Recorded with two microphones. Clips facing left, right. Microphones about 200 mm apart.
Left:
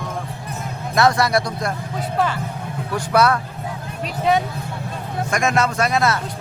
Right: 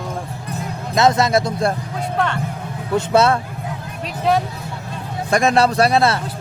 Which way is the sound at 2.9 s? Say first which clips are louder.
Right 3 dB; 25° right (ahead or behind).